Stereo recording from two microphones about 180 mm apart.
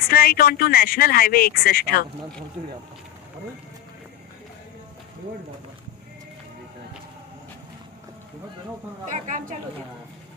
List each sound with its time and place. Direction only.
0.1 s speech: 55° left (ahead or behind)
9.0 s speech: 45° right (ahead or behind)